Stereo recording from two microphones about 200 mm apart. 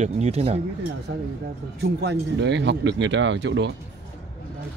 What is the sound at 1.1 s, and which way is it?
Speech, 70° right (ahead or behind).